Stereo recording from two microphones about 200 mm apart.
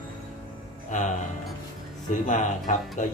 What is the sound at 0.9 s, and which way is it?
Speech, 35° left (ahead or behind).